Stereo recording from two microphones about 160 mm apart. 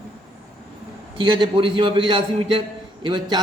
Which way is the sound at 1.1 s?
30° right (ahead or behind).